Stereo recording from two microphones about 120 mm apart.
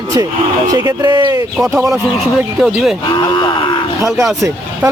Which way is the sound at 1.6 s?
5° right (ahead or behind).